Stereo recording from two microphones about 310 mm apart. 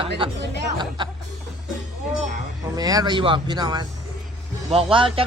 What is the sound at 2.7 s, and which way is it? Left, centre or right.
Speech, centre.